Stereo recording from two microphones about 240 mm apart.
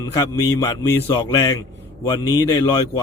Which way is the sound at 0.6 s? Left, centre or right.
Centre.